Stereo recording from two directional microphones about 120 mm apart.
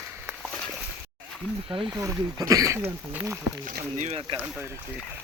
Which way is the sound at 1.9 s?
25° right (ahead or behind).